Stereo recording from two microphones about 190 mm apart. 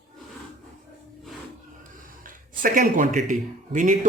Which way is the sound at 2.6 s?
45° right (ahead or behind).